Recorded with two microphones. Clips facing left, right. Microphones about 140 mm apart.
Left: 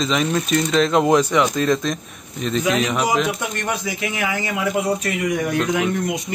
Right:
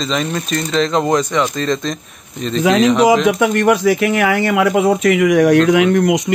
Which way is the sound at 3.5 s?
75° right (ahead or behind).